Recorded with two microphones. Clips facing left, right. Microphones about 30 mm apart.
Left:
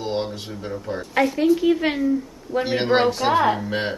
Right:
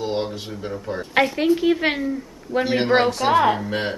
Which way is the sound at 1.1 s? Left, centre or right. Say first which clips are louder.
Even; right.